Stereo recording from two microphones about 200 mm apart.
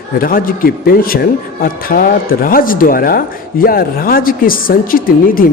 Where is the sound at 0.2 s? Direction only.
45° left (ahead or behind).